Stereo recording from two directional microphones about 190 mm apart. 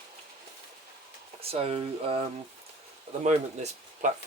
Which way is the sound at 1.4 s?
30° right (ahead or behind).